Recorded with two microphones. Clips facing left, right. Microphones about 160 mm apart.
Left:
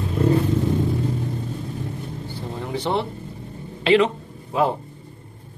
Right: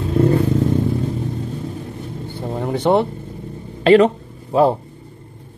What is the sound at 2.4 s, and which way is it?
Vehicle, 55° right (ahead or behind).